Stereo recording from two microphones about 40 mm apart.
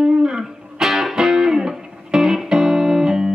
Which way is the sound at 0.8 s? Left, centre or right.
Centre.